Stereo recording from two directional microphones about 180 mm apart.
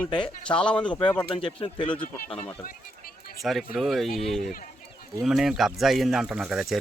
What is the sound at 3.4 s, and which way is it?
Speech, centre (ahead or behind).